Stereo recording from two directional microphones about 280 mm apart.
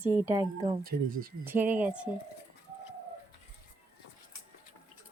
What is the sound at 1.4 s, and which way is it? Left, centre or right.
Speech, centre.